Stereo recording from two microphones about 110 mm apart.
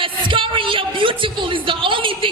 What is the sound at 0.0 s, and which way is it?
Speech, 50° right (ahead or behind).